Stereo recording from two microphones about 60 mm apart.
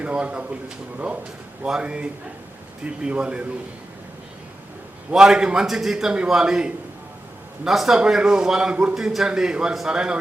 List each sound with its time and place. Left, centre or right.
0.0 s a man's voice: right
5.1 s a man's voice: centre